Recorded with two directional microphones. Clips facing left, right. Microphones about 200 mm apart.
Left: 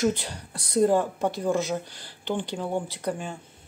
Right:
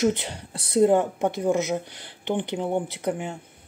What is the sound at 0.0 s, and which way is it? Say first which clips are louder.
Speech: right 2 dB; 20° right (ahead or behind).